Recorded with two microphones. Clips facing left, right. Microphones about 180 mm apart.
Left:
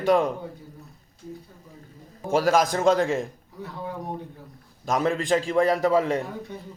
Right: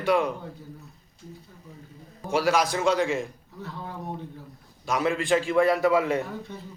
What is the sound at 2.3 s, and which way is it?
Speech, 45° left (ahead or behind).